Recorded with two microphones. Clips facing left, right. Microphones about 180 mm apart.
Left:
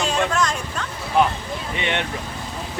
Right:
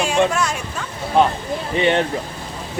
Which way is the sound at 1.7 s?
35° right (ahead or behind).